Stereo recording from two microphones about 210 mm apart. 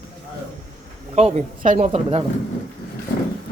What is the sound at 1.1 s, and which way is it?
Speech, 30° right (ahead or behind).